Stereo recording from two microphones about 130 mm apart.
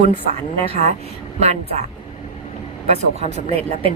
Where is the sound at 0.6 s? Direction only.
55° right (ahead or behind).